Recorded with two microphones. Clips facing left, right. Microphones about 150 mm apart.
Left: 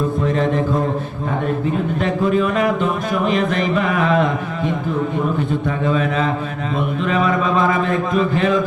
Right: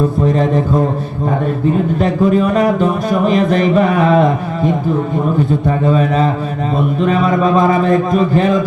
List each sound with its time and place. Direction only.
2.0 s speech: 40° right (ahead or behind)